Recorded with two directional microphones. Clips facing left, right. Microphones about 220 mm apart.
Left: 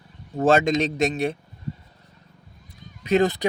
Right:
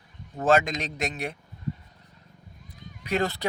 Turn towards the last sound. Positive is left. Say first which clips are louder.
# left 7 dB
turn(degrees=20)  # may be behind; listen again after turning